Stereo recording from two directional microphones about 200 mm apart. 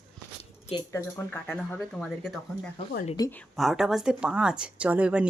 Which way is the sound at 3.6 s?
Centre (ahead or behind).